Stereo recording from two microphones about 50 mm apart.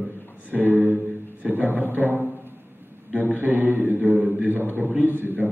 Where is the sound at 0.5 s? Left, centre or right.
Right.